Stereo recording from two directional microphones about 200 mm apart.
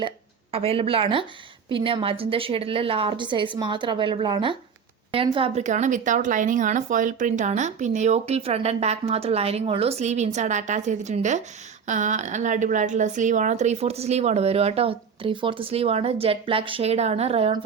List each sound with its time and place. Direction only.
0.5 s a woman's voice: 30° right (ahead or behind)